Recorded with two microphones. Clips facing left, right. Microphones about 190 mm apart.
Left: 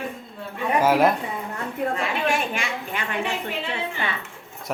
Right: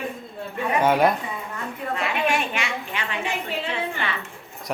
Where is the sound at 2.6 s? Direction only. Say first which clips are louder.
Even; 45° left (ahead or behind).